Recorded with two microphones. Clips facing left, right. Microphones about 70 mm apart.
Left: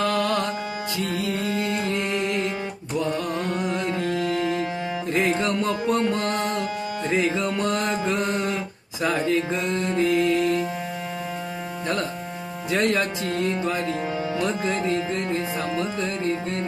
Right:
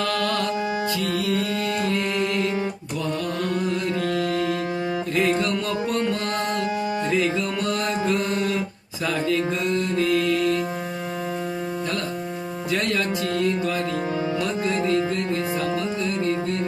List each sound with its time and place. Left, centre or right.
0.0 s music: left
9.0 s mantra: left
12.7 s music: left